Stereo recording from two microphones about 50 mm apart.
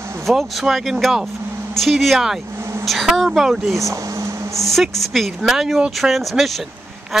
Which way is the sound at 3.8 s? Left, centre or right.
Right.